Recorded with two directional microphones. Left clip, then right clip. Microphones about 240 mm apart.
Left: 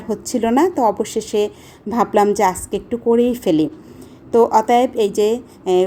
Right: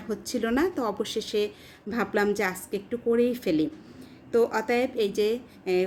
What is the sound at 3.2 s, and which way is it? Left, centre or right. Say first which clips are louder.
Speech: left 9 dB; centre.